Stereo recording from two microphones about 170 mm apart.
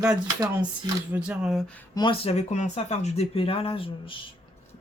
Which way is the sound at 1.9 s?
30° left (ahead or behind).